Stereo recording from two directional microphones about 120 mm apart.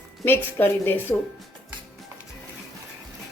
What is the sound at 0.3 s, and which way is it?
Speech, 15° left (ahead or behind).